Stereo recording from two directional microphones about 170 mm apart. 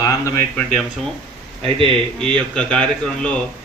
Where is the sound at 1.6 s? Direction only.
30° right (ahead or behind).